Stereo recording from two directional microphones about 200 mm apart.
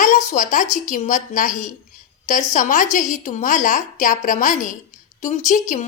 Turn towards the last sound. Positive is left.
turn(degrees=40)  # may be behind; listen again after turning